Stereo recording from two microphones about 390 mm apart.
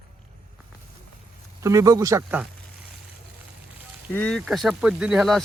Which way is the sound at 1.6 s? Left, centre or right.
Centre.